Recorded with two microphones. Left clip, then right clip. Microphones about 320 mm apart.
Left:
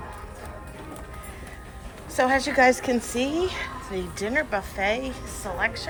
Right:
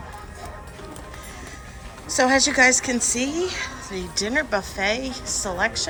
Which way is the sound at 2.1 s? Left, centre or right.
Centre.